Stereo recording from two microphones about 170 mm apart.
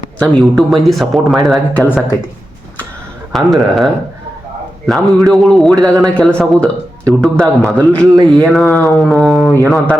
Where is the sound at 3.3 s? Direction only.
Centre (ahead or behind).